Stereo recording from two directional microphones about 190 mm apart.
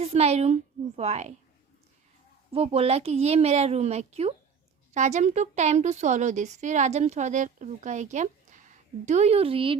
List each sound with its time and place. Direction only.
0.0 s a woman's voice: 35° right (ahead or behind)
2.5 s a woman's voice: 30° right (ahead or behind)